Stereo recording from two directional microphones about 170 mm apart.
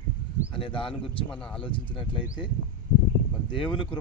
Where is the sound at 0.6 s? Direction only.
30° left (ahead or behind).